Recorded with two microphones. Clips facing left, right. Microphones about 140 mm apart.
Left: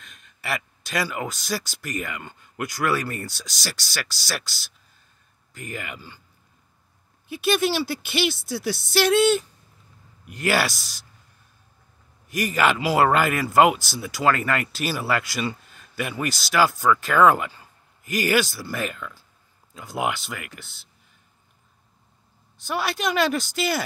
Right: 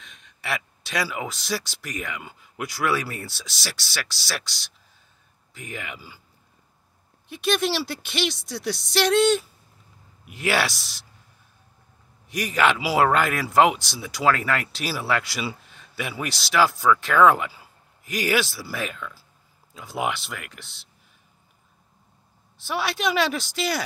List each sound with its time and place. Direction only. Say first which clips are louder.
0.0 s speech: even; centre (ahead or behind)
7.2 s speech: left 2 dB; centre (ahead or behind)
12.3 s speech: even; centre (ahead or behind)
22.6 s speech: even; centre (ahead or behind)